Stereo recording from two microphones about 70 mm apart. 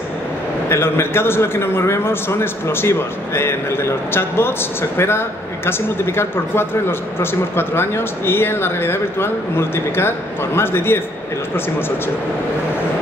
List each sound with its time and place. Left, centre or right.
0.7 s speech: left